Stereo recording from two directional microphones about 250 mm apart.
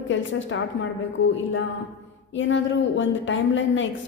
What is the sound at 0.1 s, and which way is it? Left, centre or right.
Speech, left.